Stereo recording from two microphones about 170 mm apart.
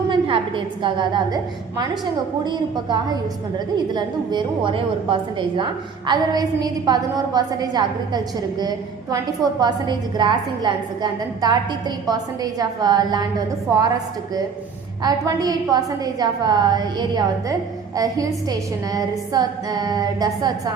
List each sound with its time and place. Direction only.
0.1 s a woman's voice: 30° right (ahead or behind)
2.4 s a woman's voice: 25° right (ahead or behind)
15.0 s a woman's voice: 20° right (ahead or behind)